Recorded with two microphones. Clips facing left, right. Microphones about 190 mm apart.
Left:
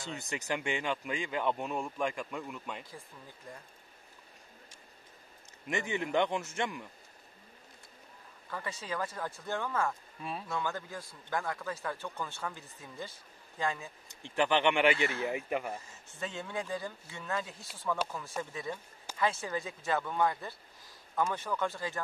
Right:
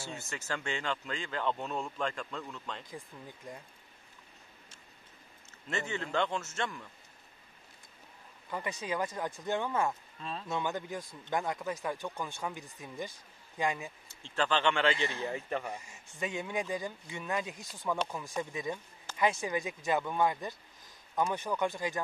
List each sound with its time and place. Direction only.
0.2 s speech: 15° left (ahead or behind)
2.8 s speech: 20° right (ahead or behind)
5.7 s speech: 15° left (ahead or behind)
8.5 s a man's voice: 15° right (ahead or behind)
10.2 s speech: 10° left (ahead or behind)
10.5 s a man's voice: 20° right (ahead or behind)
14.0 s speech: 15° left (ahead or behind)
15.7 s a man's voice: 15° right (ahead or behind)